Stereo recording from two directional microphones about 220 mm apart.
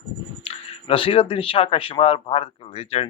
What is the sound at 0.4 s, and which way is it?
Speech, 25° left (ahead or behind).